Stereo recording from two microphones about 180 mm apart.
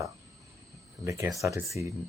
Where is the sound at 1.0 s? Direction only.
15° right (ahead or behind).